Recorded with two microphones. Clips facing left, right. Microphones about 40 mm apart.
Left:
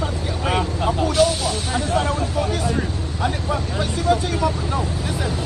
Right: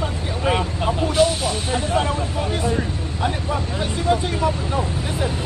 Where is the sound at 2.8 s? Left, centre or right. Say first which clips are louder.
Even; centre.